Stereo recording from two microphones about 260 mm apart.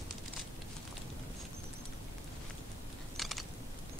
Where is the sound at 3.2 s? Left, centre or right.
Centre.